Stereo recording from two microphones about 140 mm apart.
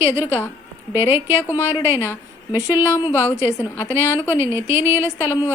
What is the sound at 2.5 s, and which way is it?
Speech, 20° left (ahead or behind).